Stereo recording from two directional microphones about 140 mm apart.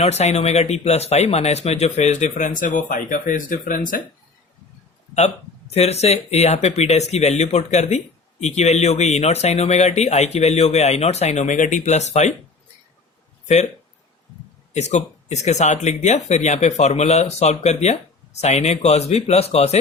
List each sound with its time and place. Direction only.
0.0 s speech: 50° left (ahead or behind); by 4.0 s 80° left
5.7 s speech: 50° left (ahead or behind)
14.8 s speech: 55° left (ahead or behind)